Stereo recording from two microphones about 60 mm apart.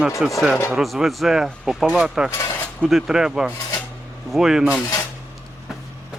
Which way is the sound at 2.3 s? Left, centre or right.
Left.